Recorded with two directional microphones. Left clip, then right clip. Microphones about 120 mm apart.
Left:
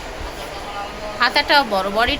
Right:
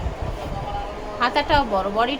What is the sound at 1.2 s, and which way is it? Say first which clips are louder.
Speech: left 4 dB; centre (ahead or behind).